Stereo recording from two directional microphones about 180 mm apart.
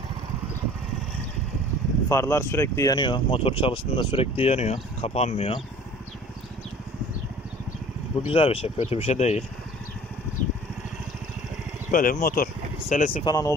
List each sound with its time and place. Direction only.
2.0 s speech: 15° left (ahead or behind); by 5.6 s 30° left (ahead or behind)
8.3 s speech: 30° left (ahead or behind)
11.9 s speech: 50° left (ahead or behind)
13.2 s speech: 20° left (ahead or behind)